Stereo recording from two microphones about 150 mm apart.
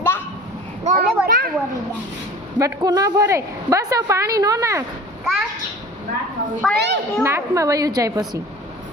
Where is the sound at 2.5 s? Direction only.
25° right (ahead or behind).